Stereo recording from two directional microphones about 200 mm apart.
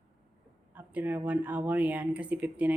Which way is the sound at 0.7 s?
10° right (ahead or behind).